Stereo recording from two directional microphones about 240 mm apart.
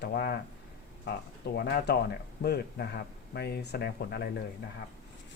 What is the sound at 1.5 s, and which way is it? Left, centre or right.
Speech, left.